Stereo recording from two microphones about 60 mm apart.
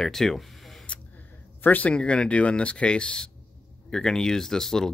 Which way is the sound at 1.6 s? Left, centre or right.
Left.